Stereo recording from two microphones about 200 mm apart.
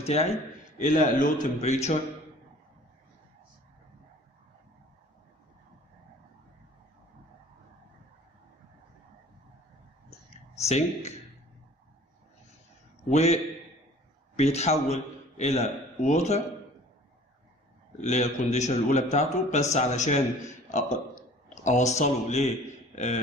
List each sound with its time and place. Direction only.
0.0 s a man's voice: 30° left (ahead or behind)
10.6 s a man's voice: 35° left (ahead or behind)
13.1 s a man's voice: 35° left (ahead or behind)
18.0 s a man's voice: 35° left (ahead or behind)